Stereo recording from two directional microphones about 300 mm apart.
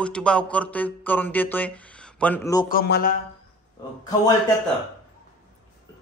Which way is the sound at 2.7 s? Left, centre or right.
Left.